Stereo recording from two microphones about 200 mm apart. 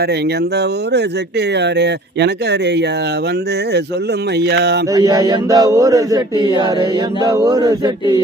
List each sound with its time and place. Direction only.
1.5 s speech: 60° right (ahead or behind)
4.4 s speech: 55° right (ahead or behind)
4.9 s speech: 20° right (ahead or behind)